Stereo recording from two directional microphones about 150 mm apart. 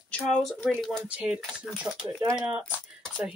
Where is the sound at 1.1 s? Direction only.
5° right (ahead or behind).